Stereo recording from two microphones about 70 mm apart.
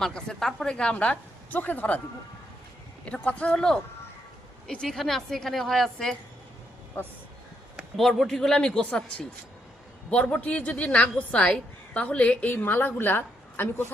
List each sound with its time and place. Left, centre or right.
0.0 s a woman's voice: centre
3.1 s a woman's voice: centre
7.0 s a woman's voice: left
7.9 s a woman's voice: centre; by 13.8 s left